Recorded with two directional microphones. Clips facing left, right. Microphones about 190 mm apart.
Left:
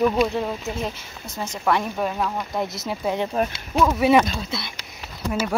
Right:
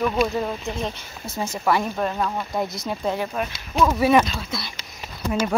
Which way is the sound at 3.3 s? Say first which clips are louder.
Left 4 dB; 30° left (ahead or behind).